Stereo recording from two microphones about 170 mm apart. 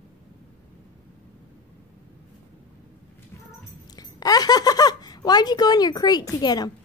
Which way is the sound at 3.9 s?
20° left (ahead or behind).